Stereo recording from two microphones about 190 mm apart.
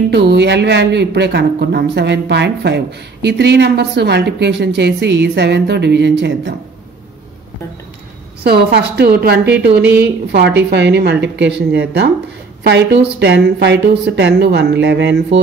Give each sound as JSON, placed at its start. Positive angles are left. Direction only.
{"t": 0.1, "sound": "speech", "side_deg": -65}
{"t": 8.5, "sound": "speech", "side_deg": -55}